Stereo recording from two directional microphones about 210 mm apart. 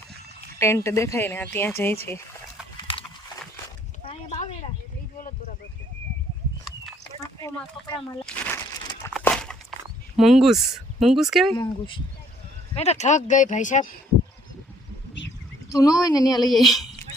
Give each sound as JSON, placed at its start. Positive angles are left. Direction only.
{"t": 0.6, "sound": "speech", "side_deg": 15}
{"t": 4.1, "sound": "a sound", "side_deg": 30}
{"t": 8.2, "sound": "a sound", "side_deg": 5}
{"t": 10.2, "sound": "speech", "side_deg": 0}
{"t": 11.5, "sound": "speech", "side_deg": 20}
{"t": 12.7, "sound": "speech", "side_deg": 30}
{"t": 15.7, "sound": "speech", "side_deg": 15}
{"t": 16.5, "sound": "speech", "side_deg": 0}